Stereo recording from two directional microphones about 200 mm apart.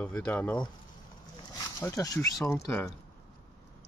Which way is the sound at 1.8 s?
15° left (ahead or behind).